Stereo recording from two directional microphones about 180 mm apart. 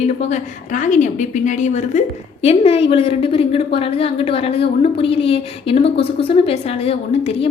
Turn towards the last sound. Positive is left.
turn(degrees=35)  # may be behind; listen again after turning